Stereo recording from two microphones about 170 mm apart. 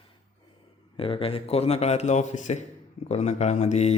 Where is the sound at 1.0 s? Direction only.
30° left (ahead or behind).